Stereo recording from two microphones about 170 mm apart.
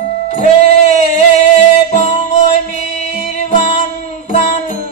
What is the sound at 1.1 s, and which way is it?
Music, 45° left (ahead or behind).